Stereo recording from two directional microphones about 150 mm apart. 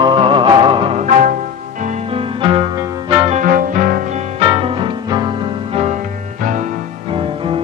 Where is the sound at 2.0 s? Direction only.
35° right (ahead or behind).